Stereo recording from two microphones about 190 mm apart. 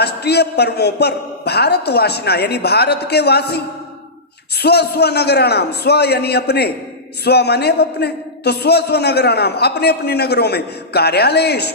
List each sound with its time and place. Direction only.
0.0 s a man's voice: 60° left (ahead or behind)